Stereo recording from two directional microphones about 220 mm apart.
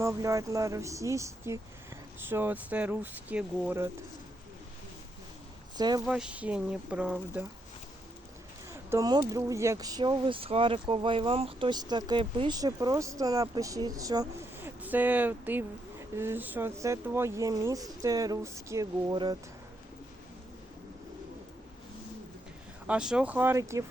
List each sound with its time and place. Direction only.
0.0 s speech: 15° right (ahead or behind)
5.7 s speech: 20° right (ahead or behind)
6.1 s speech: 5° right (ahead or behind)
8.7 s speech: 15° right (ahead or behind)
22.9 s speech: 5° right (ahead or behind)